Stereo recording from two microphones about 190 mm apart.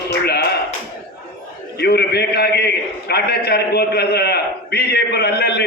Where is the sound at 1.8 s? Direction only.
60° left (ahead or behind).